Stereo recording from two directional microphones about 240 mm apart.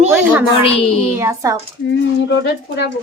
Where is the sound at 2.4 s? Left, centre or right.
Left.